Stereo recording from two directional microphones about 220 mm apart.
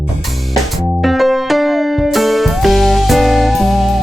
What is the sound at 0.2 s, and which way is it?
Music, centre (ahead or behind).